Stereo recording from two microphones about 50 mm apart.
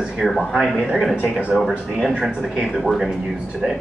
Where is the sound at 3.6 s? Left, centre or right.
Centre.